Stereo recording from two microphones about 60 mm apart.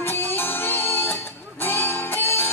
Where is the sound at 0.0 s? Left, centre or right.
Left.